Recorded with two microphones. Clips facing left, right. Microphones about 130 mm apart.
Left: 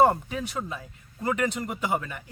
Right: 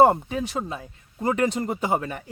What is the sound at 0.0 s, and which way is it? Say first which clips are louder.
A man's voice: right 4 dB; 25° right (ahead or behind).